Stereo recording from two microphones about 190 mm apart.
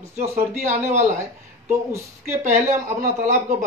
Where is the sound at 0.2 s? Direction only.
35° right (ahead or behind).